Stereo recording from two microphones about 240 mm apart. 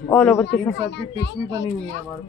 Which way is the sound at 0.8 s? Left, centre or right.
Left.